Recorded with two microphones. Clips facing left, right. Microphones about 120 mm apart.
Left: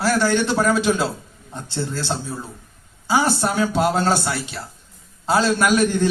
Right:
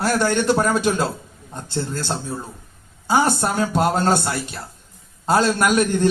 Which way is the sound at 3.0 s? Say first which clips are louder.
Right 1 dB; 45° right (ahead or behind).